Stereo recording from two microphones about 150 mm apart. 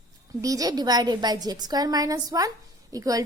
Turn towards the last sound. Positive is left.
turn(degrees=-25)  # may be behind; listen again after turning